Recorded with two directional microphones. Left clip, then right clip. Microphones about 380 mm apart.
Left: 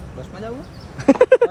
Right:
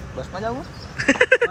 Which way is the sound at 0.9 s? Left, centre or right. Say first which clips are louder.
Left 3 dB; centre.